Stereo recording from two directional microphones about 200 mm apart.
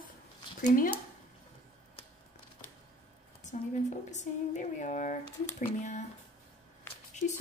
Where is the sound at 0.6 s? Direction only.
40° left (ahead or behind).